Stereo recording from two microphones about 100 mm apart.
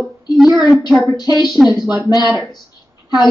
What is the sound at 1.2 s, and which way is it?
Speech, 45° left (ahead or behind).